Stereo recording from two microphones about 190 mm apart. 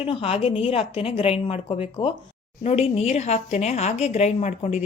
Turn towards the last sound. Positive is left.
turn(degrees=35)  # may be behind; listen again after turning